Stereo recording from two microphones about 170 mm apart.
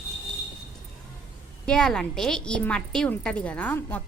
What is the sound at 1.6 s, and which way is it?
A woman's voice, 5° left (ahead or behind).